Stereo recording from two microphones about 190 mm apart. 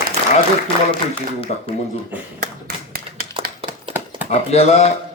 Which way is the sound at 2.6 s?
50° right (ahead or behind).